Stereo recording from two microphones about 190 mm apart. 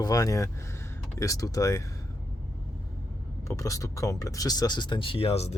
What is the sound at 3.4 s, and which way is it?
Speech, 15° left (ahead or behind).